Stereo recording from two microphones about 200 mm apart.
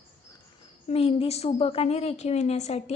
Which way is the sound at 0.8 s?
30° left (ahead or behind).